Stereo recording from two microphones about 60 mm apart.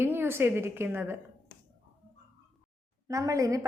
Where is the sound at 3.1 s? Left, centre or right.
Right.